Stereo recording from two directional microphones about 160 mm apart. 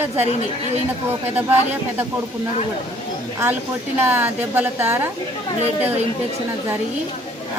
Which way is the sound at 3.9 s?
10° right (ahead or behind).